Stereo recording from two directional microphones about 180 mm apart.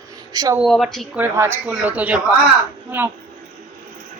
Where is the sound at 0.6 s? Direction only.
Centre (ahead or behind).